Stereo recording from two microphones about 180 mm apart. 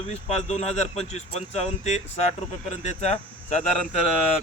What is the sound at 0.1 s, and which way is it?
Speech, 35° left (ahead or behind).